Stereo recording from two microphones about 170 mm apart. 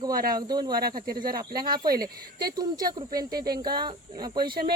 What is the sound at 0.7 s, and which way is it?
Speech, 65° right (ahead or behind).